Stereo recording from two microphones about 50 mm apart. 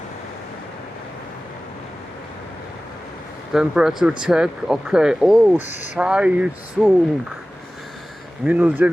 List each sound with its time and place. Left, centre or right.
3.5 s speech: centre
6.8 s speech: centre
8.4 s speech: right